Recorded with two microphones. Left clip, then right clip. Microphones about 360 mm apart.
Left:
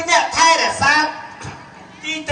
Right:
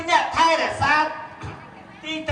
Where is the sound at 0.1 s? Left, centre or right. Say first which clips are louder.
Left 4 dB; centre.